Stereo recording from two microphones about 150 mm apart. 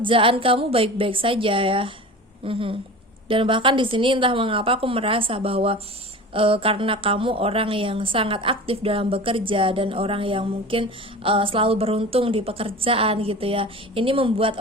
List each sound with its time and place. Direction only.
0.0 s a woman's voice: 35° right (ahead or behind)